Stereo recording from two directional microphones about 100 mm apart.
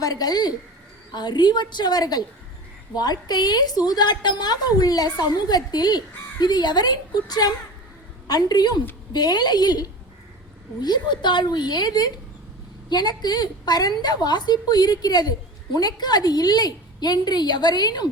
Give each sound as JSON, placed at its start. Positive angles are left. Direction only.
{"t": 0.0, "sound": "a woman's voice", "side_deg": 40}